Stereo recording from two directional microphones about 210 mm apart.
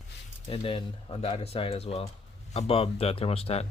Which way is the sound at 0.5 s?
25° left (ahead or behind).